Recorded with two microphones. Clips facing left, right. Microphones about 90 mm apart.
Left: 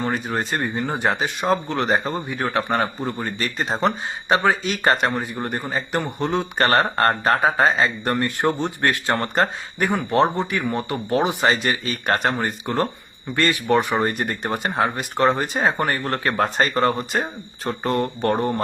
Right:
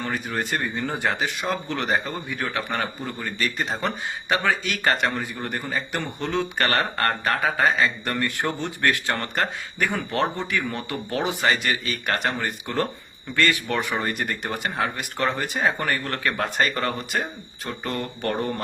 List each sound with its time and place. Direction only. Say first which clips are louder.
0.0 s speech: left 4 dB; 30° left (ahead or behind)
0.8 s speech: left 4 dB; 20° left (ahead or behind)